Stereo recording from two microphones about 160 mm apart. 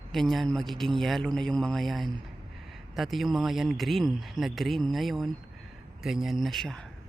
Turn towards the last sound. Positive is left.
turn(degrees=5)  # may be behind; listen again after turning